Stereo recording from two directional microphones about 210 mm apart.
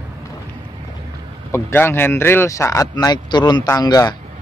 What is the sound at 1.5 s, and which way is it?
Speech, 10° left (ahead or behind).